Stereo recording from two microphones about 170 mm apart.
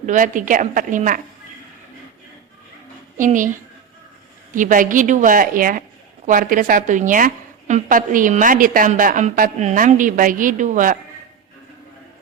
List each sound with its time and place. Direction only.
0.0 s a woman's voice: 50° right (ahead or behind)
3.2 s a woman's voice: 50° right (ahead or behind)